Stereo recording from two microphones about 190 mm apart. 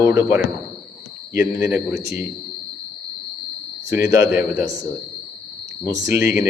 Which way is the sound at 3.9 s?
15° right (ahead or behind).